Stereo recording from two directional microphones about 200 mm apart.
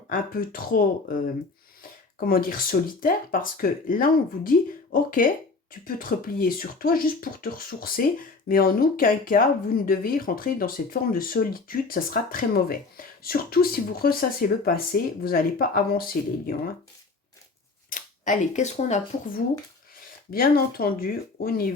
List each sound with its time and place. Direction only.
0.1 s speech: 45° left (ahead or behind)
2.1 s speech: 45° left (ahead or behind)
17.8 s speech: 40° left (ahead or behind)
20.3 s speech: 50° left (ahead or behind)